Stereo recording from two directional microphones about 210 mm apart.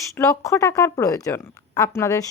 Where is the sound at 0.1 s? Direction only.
15° left (ahead or behind).